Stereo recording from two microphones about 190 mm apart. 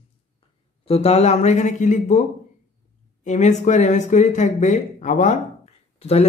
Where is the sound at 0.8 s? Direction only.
30° left (ahead or behind).